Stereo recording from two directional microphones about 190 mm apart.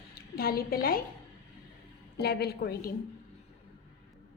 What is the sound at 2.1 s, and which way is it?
Speech, 55° left (ahead or behind).